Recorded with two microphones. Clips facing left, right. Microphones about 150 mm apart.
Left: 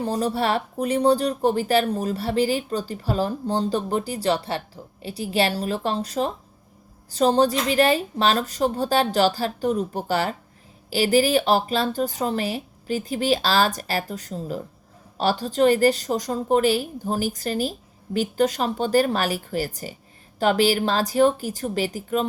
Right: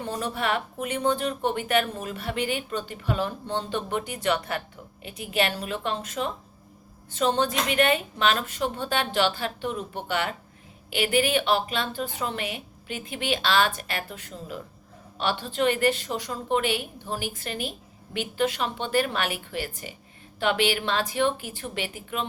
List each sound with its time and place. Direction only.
0.0 s speech: 35° left (ahead or behind)